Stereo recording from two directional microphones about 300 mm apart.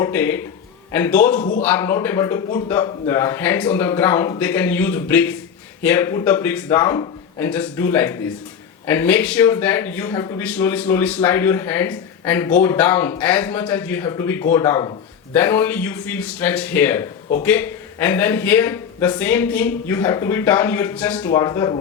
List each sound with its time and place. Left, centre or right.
0.0 s speech: centre
1.4 s a man's voice: left
1.6 s speech: centre